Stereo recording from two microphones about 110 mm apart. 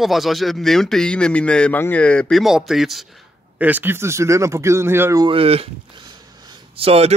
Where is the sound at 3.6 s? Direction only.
15° right (ahead or behind).